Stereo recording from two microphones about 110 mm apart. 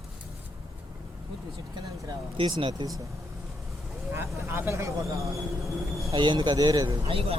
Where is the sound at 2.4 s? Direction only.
55° right (ahead or behind).